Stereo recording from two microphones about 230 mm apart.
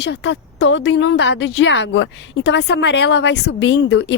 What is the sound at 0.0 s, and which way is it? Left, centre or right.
Speech, left.